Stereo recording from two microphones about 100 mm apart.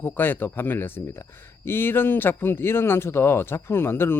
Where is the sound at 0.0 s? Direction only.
20° left (ahead or behind).